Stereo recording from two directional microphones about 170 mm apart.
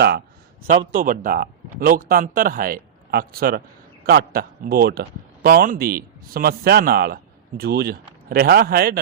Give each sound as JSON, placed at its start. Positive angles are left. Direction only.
{"t": 0.9, "sound": "speech", "side_deg": -55}